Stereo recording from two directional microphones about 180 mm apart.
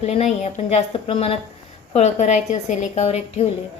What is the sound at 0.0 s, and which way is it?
A woman's voice, 35° left (ahead or behind).